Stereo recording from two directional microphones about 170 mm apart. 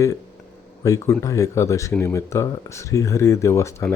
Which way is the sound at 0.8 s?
20° left (ahead or behind).